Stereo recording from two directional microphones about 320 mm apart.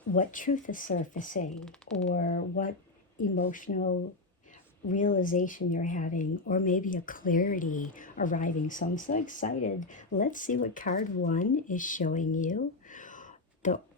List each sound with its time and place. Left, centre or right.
0.2 s speech: left